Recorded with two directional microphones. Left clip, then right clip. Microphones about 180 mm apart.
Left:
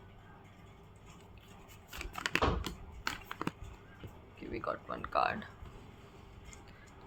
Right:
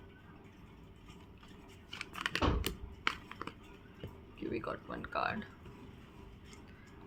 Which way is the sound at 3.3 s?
40° left (ahead or behind).